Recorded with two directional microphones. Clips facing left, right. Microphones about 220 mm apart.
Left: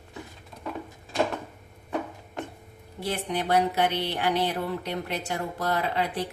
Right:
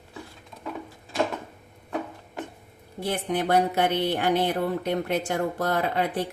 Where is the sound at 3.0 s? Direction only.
50° right (ahead or behind).